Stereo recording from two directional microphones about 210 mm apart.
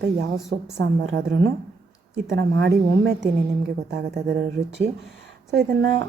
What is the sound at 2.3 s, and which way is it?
Speech, 55° right (ahead or behind).